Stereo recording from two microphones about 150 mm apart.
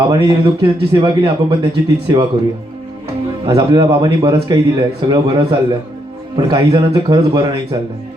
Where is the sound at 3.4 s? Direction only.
30° right (ahead or behind).